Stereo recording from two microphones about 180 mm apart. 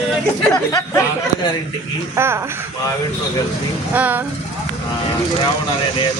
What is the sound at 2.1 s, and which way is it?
Speech, 15° right (ahead or behind).